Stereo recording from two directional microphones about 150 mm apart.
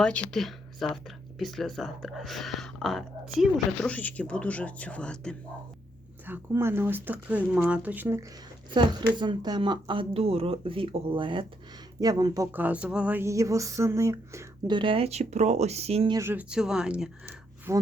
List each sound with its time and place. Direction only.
0.0 s speech: 5° left (ahead or behind)
6.2 s speech: 15° right (ahead or behind)
8.7 s speech: 30° right (ahead or behind)
14.7 s speech: 35° right (ahead or behind)
16.1 s speech: 15° right (ahead or behind)
17.7 s speech: 15° right (ahead or behind)